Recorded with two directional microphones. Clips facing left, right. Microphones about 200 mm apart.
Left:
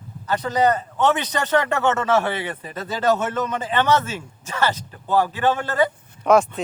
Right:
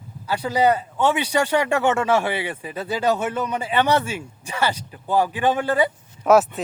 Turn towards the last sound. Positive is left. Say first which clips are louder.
# right 1 dB
turn(degrees=-5)  # may be behind; listen again after turning